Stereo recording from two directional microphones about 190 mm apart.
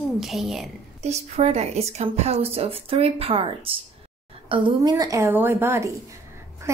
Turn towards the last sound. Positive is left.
turn(degrees=-10)  # may be behind; listen again after turning